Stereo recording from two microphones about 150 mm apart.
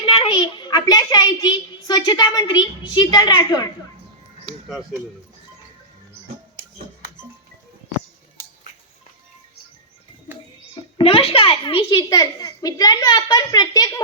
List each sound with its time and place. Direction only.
0.0 s a child's voice: 40° left (ahead or behind)
10.9 s a child's voice: 40° left (ahead or behind)
11.9 s a child's voice: 25° left (ahead or behind)